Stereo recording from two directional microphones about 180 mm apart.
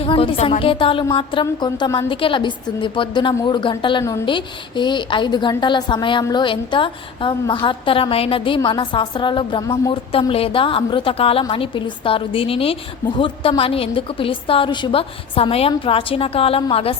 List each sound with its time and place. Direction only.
0.0 s a woman's voice: 30° left (ahead or behind)